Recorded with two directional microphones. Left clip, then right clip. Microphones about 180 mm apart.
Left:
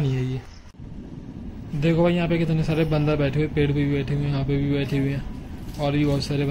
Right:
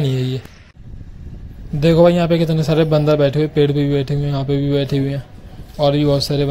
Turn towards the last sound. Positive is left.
turn(degrees=-20)  # may be behind; listen again after turning